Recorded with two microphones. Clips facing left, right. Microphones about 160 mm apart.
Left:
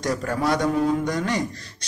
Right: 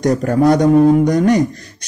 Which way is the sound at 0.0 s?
45° right (ahead or behind).